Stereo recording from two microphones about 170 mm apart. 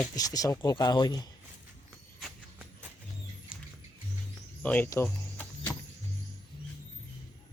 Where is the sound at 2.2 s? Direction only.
5° right (ahead or behind).